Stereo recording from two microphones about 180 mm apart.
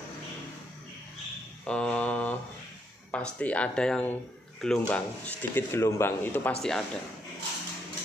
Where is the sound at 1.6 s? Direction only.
5° left (ahead or behind).